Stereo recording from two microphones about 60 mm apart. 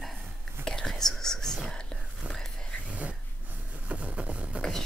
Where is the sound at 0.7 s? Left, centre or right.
Centre.